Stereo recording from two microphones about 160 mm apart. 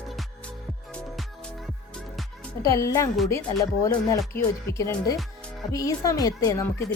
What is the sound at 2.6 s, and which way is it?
Speech, 20° left (ahead or behind).